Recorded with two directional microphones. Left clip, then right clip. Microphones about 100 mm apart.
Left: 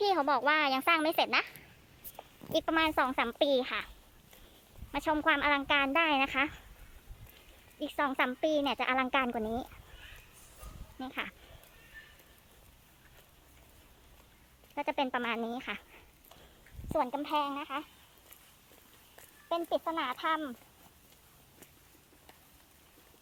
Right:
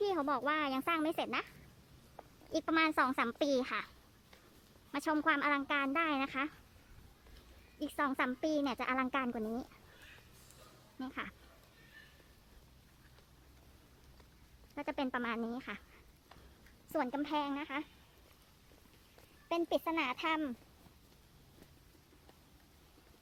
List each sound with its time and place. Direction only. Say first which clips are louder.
0.0 s a child's voice: left 6 dB; centre (ahead or behind)
4.9 s a child's voice: left 4 dB; 5° left (ahead or behind)
5.2 s speech: left 5 dB; 15° left (ahead or behind)
7.8 s a woman's voice: left 4 dB; 10° left (ahead or behind); by 9.7 s 25° left (ahead or behind)
10.9 s speech: left 5 dB; 15° left (ahead or behind)
14.8 s a woman's voice: left 6 dB; 15° left (ahead or behind)
16.9 s a child's voice: left 5 dB; 5° right (ahead or behind)
19.5 s speech: left 2 dB; 30° right (ahead or behind)